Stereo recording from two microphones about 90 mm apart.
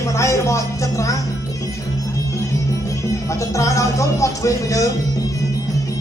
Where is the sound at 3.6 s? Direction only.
35° left (ahead or behind).